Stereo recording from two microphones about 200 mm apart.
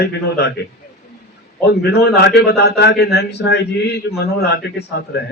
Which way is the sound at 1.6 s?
55° left (ahead or behind).